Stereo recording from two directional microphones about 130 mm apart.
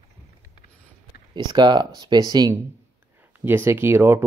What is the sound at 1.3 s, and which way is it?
Speech, 35° right (ahead or behind).